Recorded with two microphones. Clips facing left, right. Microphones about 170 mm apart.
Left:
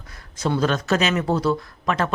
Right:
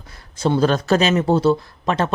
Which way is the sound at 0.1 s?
30° right (ahead or behind).